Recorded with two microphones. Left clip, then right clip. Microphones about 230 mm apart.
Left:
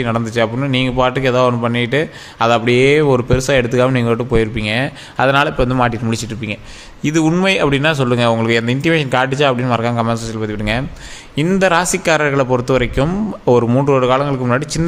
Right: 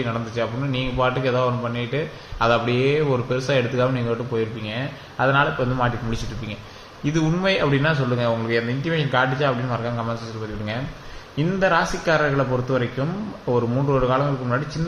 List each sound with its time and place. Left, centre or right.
0.0 s a man's voice: left
11.3 s a man's voice: left